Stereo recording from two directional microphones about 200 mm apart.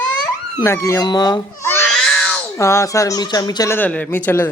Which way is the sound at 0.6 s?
15° left (ahead or behind).